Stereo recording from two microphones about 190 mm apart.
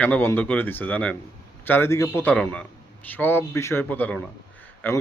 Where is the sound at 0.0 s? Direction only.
10° left (ahead or behind).